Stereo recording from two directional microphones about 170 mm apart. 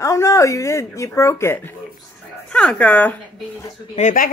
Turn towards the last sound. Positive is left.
turn(degrees=50)  # may be behind; listen again after turning